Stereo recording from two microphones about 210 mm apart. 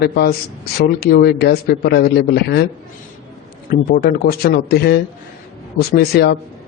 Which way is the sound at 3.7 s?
45° left (ahead or behind).